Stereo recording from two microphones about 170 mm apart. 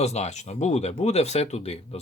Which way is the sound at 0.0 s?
40° left (ahead or behind).